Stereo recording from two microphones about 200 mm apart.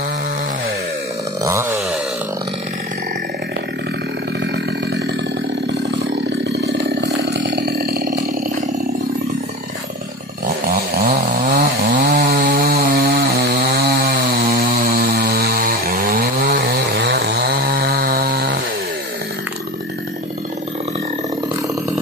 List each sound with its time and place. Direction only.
1.4 s chainsaw: 15° right (ahead or behind)
6.5 s chainsaw: 55° right (ahead or behind)
10.4 s chainsaw: 45° right (ahead or behind)